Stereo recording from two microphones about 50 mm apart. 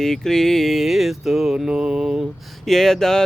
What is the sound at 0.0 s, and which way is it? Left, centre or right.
Music, centre.